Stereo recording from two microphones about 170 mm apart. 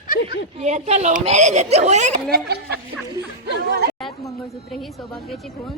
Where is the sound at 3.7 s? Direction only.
70° right (ahead or behind).